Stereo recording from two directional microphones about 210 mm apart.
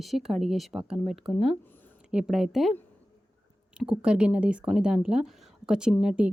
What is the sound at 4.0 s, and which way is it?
Speech, 5° right (ahead or behind).